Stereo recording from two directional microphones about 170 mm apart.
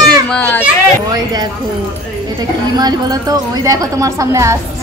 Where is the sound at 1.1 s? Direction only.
25° right (ahead or behind).